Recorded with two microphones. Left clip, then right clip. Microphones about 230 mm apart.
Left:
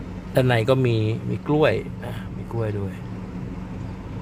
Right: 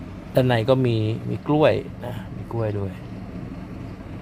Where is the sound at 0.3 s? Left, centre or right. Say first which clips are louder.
Right 1 dB; centre.